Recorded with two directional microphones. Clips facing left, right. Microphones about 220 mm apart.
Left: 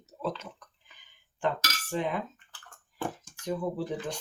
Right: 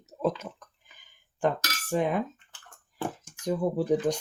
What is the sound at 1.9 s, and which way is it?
Speech, 50° right (ahead or behind).